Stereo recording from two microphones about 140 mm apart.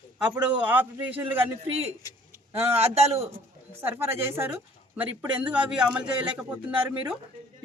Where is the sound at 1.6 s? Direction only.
45° right (ahead or behind).